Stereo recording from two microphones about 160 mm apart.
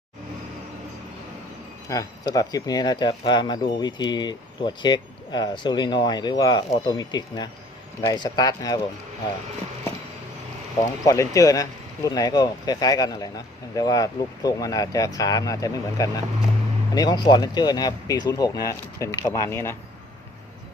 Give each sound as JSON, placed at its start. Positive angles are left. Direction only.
{"t": 1.9, "sound": "speech", "side_deg": 20}
{"t": 11.0, "sound": "speech", "side_deg": 20}